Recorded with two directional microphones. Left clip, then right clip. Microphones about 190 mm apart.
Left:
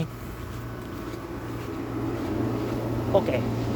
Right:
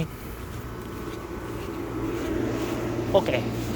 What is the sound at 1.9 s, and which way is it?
Vehicle, 55° left (ahead or behind).